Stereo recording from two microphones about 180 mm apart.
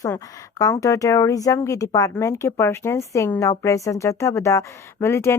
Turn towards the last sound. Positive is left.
turn(degrees=15)  # may be behind; listen again after turning